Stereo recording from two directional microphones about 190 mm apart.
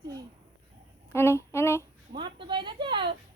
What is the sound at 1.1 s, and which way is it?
Speech, 15° left (ahead or behind).